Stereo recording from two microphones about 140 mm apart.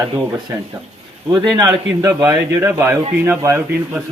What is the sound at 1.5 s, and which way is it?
A man's voice, 25° right (ahead or behind).